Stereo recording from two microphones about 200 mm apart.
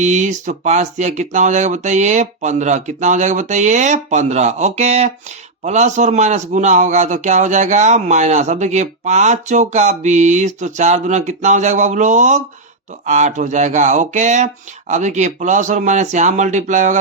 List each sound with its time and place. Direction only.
0.0 s a man's voice: 35° right (ahead or behind)